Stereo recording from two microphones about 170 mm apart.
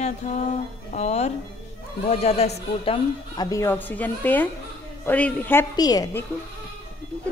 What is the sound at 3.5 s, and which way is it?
Speech, 15° left (ahead or behind).